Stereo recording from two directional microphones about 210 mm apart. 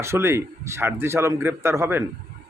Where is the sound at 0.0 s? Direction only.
10° right (ahead or behind).